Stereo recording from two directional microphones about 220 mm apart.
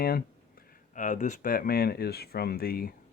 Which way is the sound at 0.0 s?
45° left (ahead or behind).